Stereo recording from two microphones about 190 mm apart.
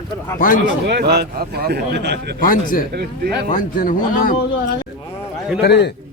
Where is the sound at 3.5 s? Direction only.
45° left (ahead or behind).